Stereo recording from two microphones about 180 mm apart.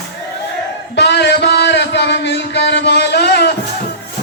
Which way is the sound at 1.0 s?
70° left (ahead or behind).